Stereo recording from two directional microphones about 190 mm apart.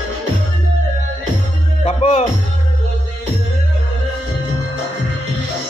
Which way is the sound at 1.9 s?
30° left (ahead or behind).